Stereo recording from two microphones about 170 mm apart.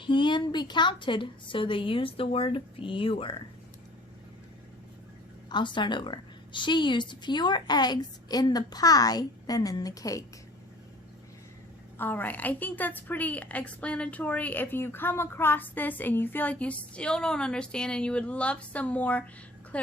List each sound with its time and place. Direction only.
0.0 s a woman's voice: 30° left (ahead or behind)
5.5 s a woman's voice: 25° left (ahead or behind)
11.9 s a woman's voice: 10° left (ahead or behind)